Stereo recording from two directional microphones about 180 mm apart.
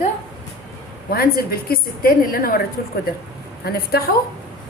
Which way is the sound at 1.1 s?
55° left (ahead or behind).